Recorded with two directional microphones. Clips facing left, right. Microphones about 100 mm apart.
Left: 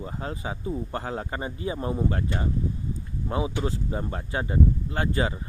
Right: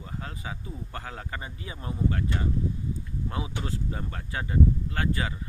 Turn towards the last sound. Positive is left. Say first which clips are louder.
# left 3 dB
turn(degrees=25)  # may be behind; listen again after turning